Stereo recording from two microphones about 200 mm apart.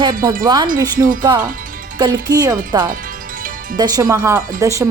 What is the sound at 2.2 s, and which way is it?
Speech, 20° right (ahead or behind).